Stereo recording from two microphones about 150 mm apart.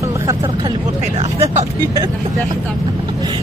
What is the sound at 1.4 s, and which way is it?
Speech, 45° right (ahead or behind).